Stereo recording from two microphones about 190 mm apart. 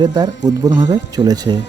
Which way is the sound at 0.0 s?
20° right (ahead or behind).